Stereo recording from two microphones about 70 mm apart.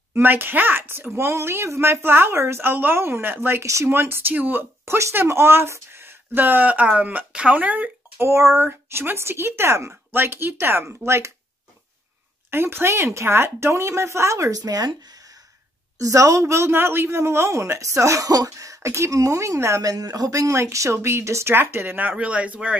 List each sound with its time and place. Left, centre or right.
0.1 s speech: right
3.6 s speech: right
3.9 s speech: right
8.2 s speech: right
12.4 s speech: right
14.6 s speech: right
16.0 s speech: right; by 22.8 s centre